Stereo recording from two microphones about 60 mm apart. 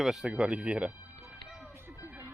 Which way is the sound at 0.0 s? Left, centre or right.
Centre.